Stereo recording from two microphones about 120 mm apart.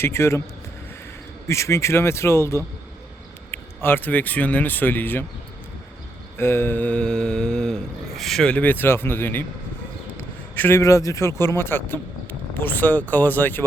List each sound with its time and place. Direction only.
0.0 s speech: 20° left (ahead or behind)
1.5 s speech: 25° left (ahead or behind)
3.5 s mantra: 20° left (ahead or behind)
6.3 s mantra: 20° left (ahead or behind)
10.2 s a man's voice: 20° left (ahead or behind)